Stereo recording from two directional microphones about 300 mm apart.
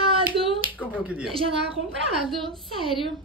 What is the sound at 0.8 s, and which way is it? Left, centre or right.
Speech, centre.